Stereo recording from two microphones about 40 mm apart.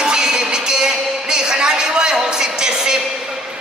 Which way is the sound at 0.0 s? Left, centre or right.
Centre.